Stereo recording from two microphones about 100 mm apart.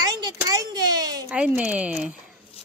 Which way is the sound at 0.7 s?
45° right (ahead or behind).